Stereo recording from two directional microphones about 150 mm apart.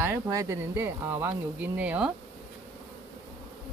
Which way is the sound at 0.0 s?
20° right (ahead or behind).